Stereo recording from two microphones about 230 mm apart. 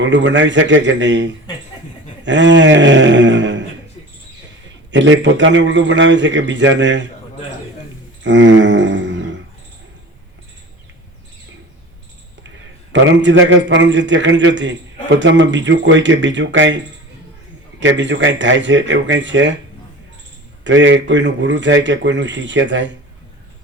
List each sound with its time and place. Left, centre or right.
0.0 s a man's voice: right
4.9 s a man's voice: right
8.2 s a sound: right
12.9 s a man's voice: right
20.7 s a man's voice: right